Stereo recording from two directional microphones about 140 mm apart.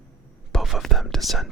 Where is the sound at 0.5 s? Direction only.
Centre (ahead or behind).